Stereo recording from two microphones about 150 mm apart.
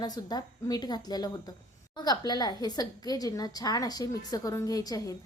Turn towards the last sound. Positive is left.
turn(degrees=25)  # may be behind; listen again after turning